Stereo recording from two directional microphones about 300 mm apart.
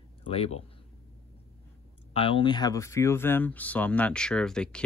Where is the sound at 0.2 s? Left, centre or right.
Centre.